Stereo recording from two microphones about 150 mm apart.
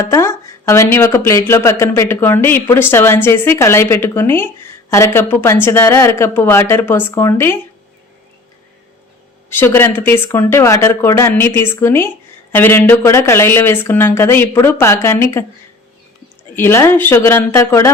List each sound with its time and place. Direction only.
0.1 s speech: 20° left (ahead or behind)
9.5 s speech: 15° left (ahead or behind)
16.6 s speech: 15° left (ahead or behind)